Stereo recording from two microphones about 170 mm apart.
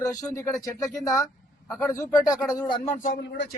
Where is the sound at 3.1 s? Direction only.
90° left.